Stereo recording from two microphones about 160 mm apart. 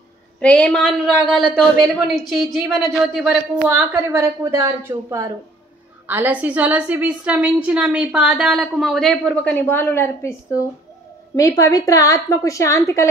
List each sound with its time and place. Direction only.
0.4 s a woman's voice: 5° left (ahead or behind)